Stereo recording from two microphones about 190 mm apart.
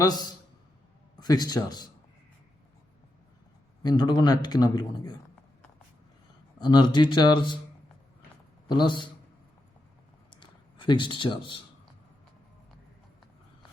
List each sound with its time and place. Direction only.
0.0 s speech: 20° left (ahead or behind)
3.8 s speech: 20° left (ahead or behind)
6.6 s speech: 20° left (ahead or behind)
8.6 s a man's voice: 25° left (ahead or behind)
10.2 s a sound: 25° left (ahead or behind)